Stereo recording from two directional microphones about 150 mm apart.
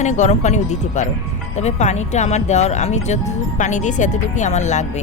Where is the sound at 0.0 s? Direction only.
55° left (ahead or behind).